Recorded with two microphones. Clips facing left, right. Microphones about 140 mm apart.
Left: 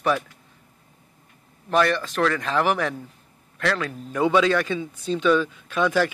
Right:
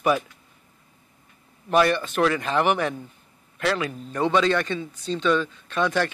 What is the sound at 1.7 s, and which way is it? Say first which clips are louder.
Speech: right 1 dB; 5° right (ahead or behind).